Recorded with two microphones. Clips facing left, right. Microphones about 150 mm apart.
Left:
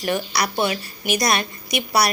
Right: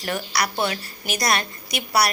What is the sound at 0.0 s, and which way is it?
A woman's voice, 20° left (ahead or behind).